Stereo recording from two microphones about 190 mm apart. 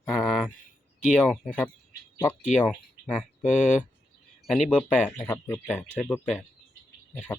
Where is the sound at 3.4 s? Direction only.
40° left (ahead or behind).